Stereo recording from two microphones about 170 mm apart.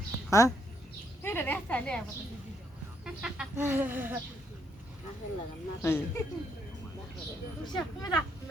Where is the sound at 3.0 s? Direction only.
5° right (ahead or behind).